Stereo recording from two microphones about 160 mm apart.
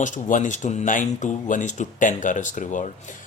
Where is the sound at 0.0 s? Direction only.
55° left (ahead or behind).